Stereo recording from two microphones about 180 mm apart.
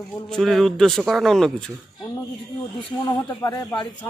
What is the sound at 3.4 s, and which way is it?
Speech, 20° left (ahead or behind).